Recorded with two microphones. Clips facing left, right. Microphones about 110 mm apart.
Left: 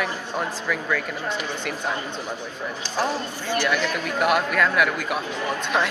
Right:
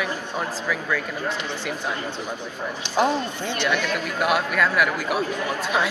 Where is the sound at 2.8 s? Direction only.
20° right (ahead or behind).